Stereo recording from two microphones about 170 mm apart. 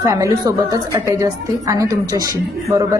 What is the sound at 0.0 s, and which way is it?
A woman's voice, 15° right (ahead or behind).